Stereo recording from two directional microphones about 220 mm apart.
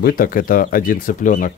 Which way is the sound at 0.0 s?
40° left (ahead or behind).